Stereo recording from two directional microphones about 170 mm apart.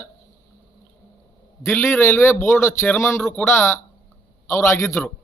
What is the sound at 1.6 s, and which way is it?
Speech, 10° left (ahead or behind).